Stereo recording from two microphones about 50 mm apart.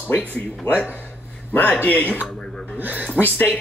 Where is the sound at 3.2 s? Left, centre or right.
Left.